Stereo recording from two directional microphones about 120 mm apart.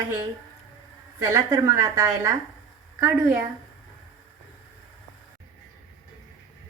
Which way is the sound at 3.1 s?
10° right (ahead or behind).